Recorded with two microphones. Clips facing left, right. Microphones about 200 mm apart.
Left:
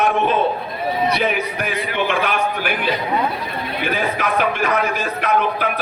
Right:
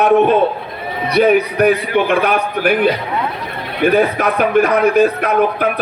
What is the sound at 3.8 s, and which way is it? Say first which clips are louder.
Speech: right 10 dB; 60° right (ahead or behind).